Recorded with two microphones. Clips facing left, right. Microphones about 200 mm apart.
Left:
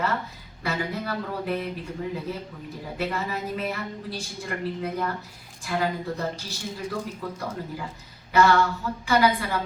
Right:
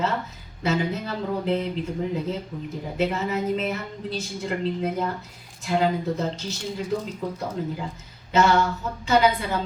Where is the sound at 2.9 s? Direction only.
20° right (ahead or behind).